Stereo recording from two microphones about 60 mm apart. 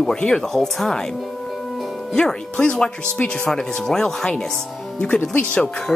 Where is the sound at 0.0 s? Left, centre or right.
Centre.